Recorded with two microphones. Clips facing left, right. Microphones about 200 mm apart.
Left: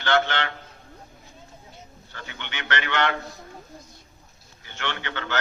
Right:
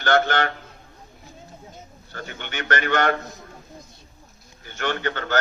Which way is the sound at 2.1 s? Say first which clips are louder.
Right 5 dB; 45° right (ahead or behind).